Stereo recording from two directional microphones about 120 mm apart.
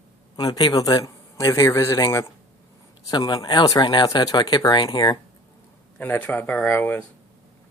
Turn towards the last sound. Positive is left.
turn(degrees=15)  # may be behind; listen again after turning